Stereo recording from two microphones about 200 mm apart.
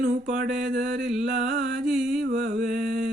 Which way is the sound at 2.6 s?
40° right (ahead or behind).